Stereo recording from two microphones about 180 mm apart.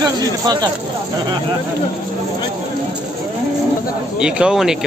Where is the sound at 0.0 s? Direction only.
20° right (ahead or behind).